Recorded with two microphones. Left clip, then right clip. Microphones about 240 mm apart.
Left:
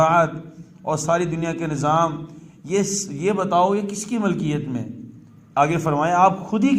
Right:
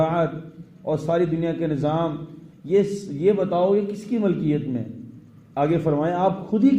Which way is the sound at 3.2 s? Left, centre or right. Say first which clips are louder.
Left 1 dB; left.